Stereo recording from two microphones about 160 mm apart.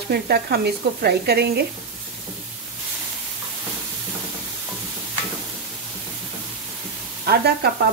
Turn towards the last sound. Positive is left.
turn(degrees=-90)